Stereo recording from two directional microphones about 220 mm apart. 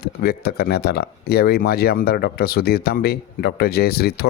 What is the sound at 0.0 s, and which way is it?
Speech, 45° left (ahead or behind).